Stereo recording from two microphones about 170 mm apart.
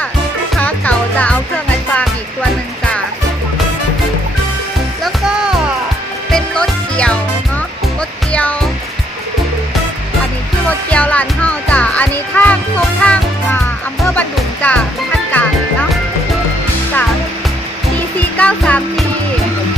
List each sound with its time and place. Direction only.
0.5 s music: 10° left (ahead or behind)
5.0 s music: 5° right (ahead or behind)
8.3 s music: 5° left (ahead or behind)
10.7 s music: 10° left (ahead or behind)
18.3 s music: 10° left (ahead or behind)